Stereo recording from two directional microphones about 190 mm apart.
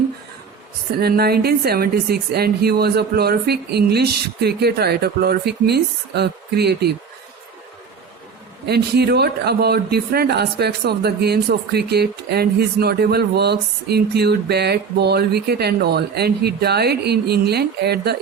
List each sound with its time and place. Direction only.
0.9 s speech: 55° right (ahead or behind)
8.6 s speech: 60° right (ahead or behind)